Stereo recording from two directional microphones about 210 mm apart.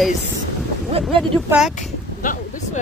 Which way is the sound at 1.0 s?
25° right (ahead or behind).